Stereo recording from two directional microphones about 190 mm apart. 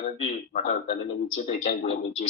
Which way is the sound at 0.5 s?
35° left (ahead or behind).